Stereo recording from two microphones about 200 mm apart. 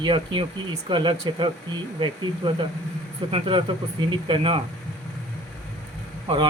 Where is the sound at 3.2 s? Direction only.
25° right (ahead or behind).